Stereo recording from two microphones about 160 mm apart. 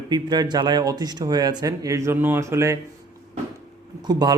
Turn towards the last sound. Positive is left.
turn(degrees=-25)  # may be behind; listen again after turning